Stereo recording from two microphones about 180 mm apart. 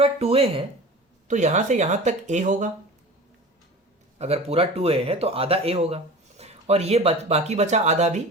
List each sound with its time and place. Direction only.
0.0 s speech: 35° right (ahead or behind)
4.2 s speech: 35° right (ahead or behind)